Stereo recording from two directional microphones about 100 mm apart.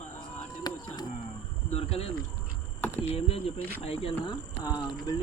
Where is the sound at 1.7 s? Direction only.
80° left.